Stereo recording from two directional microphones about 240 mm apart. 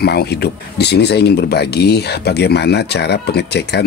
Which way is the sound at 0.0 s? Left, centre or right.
Left.